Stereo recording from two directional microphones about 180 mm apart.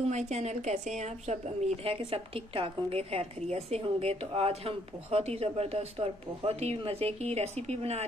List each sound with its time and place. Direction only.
0.1 s a woman's voice: 40° right (ahead or behind)